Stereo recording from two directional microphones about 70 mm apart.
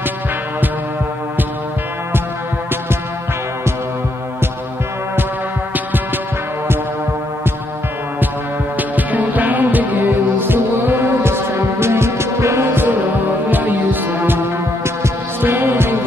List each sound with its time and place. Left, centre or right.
8.7 s music: right
15.4 s music: right